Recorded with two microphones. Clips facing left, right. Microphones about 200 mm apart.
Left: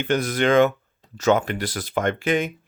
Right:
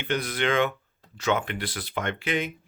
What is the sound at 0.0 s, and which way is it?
Speech, 45° left (ahead or behind).